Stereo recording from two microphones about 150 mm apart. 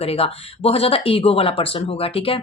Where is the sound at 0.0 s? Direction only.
40° left (ahead or behind).